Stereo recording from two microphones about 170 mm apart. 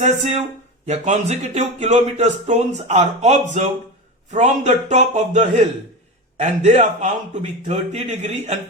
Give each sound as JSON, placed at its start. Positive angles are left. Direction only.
{"t": 0.0, "sound": "speech", "side_deg": -40}